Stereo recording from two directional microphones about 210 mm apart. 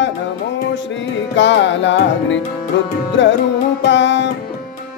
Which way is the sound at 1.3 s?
60° left (ahead or behind).